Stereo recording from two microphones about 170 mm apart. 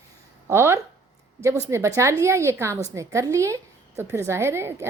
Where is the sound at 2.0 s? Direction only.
15° right (ahead or behind).